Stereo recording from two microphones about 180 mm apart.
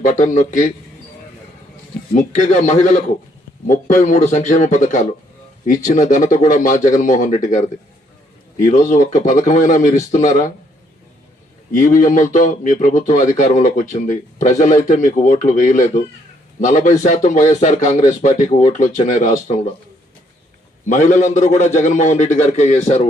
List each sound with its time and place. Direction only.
0.0 s speech: 45° left (ahead or behind)
2.1 s speech: 45° left (ahead or behind)
8.6 s speech: 45° left (ahead or behind)
11.8 s speech: 45° left (ahead or behind)
20.8 s speech: 45° left (ahead or behind)